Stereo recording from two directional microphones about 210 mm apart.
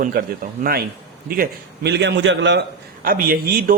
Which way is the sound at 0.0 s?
40° right (ahead or behind).